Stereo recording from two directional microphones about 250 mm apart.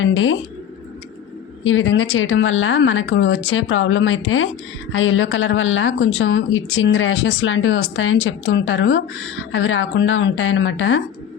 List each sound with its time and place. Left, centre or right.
0.0 s speech: left
1.6 s speech: left